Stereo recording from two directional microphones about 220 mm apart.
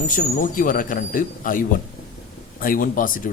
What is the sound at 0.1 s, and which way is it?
Speech, 40° left (ahead or behind).